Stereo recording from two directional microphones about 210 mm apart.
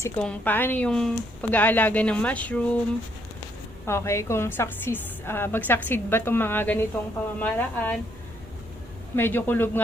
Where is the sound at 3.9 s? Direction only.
15° left (ahead or behind).